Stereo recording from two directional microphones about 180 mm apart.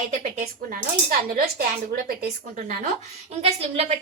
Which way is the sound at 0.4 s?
55° right (ahead or behind).